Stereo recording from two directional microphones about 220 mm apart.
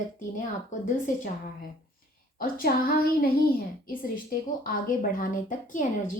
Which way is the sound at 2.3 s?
40° left (ahead or behind).